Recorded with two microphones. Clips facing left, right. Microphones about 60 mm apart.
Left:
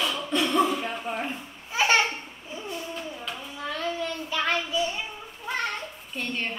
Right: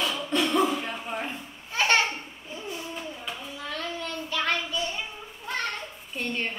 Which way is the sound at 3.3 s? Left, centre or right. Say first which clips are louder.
Left 2 dB; centre.